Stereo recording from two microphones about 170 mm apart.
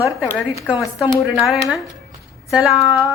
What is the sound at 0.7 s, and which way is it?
Speech, centre (ahead or behind).